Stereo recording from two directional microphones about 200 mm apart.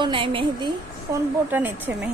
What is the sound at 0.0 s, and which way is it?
Speech, 25° right (ahead or behind).